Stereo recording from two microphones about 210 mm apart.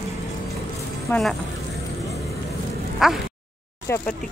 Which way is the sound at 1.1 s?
Centre (ahead or behind).